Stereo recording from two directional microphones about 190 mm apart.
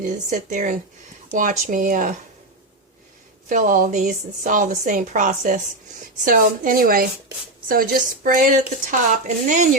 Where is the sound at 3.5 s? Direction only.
45° right (ahead or behind).